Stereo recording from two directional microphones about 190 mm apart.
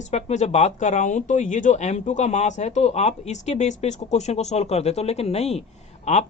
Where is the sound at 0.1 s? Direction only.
35° left (ahead or behind).